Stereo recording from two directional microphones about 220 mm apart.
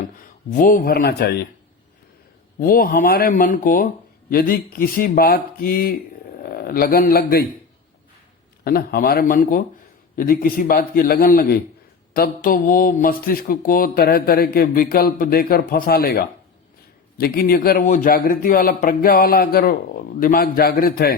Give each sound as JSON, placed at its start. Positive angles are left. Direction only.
{"t": 0.5, "sound": "speech", "side_deg": 40}
{"t": 2.6, "sound": "a man's voice", "side_deg": 40}
{"t": 8.6, "sound": "speech", "side_deg": 45}